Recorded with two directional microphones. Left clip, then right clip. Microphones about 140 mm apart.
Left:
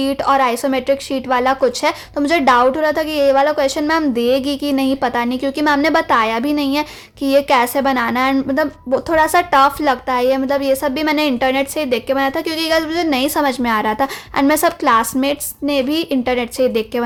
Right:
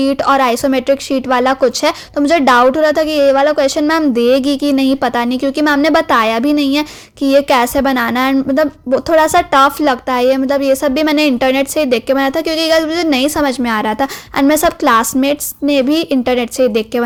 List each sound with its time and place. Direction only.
0.0 s a woman's voice: 25° right (ahead or behind)